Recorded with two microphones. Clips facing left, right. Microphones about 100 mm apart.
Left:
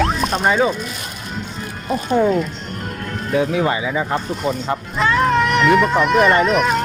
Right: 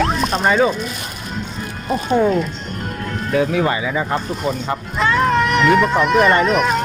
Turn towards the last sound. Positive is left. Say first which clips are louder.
# even
turn(degrees=0)  # may be behind; listen again after turning